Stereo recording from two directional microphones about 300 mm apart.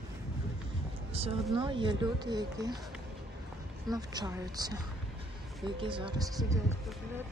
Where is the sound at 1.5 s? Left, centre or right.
Centre.